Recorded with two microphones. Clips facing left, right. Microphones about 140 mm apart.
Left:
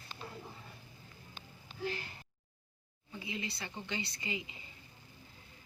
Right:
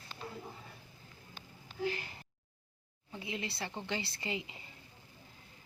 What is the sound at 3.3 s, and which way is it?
Speech, 65° right (ahead or behind).